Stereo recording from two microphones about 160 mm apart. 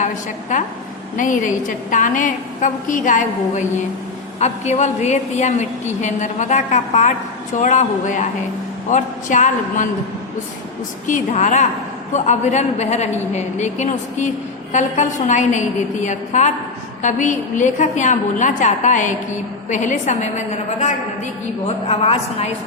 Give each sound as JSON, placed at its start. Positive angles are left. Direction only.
{"t": 1.1, "sound": "a woman's voice", "side_deg": 55}
{"t": 11.3, "sound": "a woman's voice", "side_deg": 45}